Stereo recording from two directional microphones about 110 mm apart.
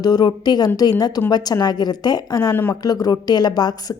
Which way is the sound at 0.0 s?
40° left (ahead or behind).